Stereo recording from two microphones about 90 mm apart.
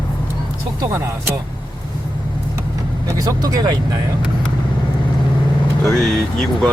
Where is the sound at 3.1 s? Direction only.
45° right (ahead or behind).